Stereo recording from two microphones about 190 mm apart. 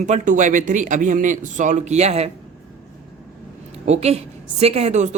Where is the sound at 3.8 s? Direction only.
35° right (ahead or behind).